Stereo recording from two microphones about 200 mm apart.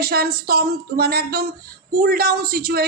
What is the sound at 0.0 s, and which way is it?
Speech, 50° right (ahead or behind).